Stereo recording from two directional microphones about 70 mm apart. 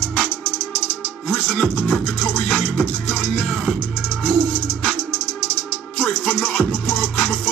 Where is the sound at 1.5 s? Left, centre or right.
Centre.